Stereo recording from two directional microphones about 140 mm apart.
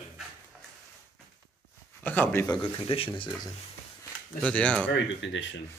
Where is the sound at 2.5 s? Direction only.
40° left (ahead or behind).